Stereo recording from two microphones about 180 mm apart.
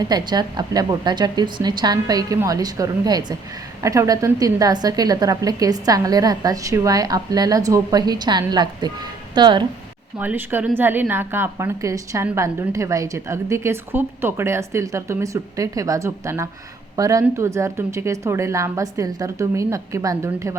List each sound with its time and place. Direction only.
0.0 s a woman's voice: 25° right (ahead or behind)
10.2 s a woman's voice: 10° right (ahead or behind)